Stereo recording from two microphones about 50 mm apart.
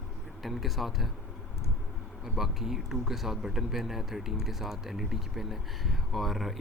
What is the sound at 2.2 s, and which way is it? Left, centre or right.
Speech, centre.